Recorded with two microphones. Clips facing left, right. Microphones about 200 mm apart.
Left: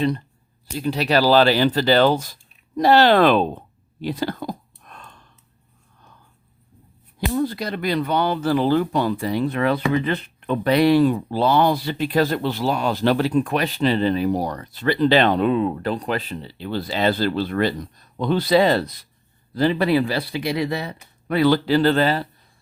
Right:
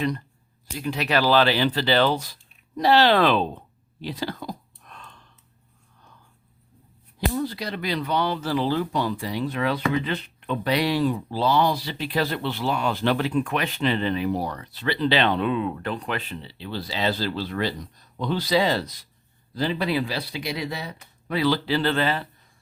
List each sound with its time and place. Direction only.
0.8 s speech: 35° left (ahead or behind); by 3.4 s 50° left (ahead or behind)
4.0 s whispering: 50° left (ahead or behind)
7.3 s speech: 50° left (ahead or behind)